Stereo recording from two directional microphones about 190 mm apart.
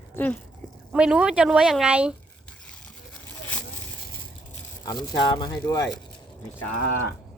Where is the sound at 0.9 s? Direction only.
5° right (ahead or behind).